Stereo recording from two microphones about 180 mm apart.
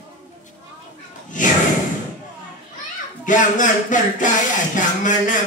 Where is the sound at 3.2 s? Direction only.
45° left (ahead or behind).